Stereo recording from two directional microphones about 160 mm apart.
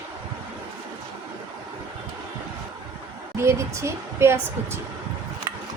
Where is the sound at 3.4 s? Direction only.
15° right (ahead or behind).